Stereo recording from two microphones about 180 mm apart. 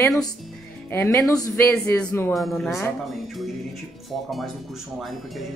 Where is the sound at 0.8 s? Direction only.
10° left (ahead or behind).